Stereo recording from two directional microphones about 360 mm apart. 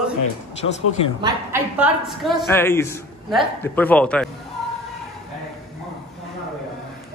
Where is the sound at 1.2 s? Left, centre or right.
Centre.